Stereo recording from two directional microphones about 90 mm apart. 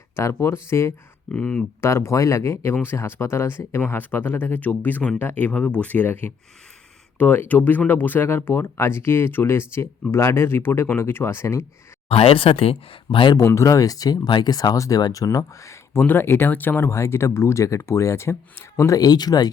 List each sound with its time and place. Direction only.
0.2 s speech: 30° left (ahead or behind)
1.3 s speech: 15° left (ahead or behind)
1.8 s speech: 30° left (ahead or behind)
12.0 s speech: 90° left; by 13.3 s 75° left (ahead or behind)
13.3 s speech: 35° left (ahead or behind)
14.3 s speech: 55° left (ahead or behind); by 16.0 s 35° left (ahead or behind)
16.0 s speech: 20° left (ahead or behind)
18.9 s speech: 50° left (ahead or behind)